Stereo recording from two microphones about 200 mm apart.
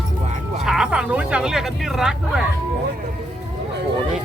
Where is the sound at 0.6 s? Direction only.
Centre (ahead or behind).